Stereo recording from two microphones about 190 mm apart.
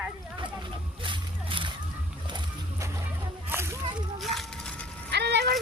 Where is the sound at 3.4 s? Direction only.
15° right (ahead or behind).